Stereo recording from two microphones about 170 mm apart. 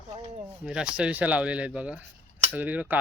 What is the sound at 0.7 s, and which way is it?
Speech, 5° right (ahead or behind).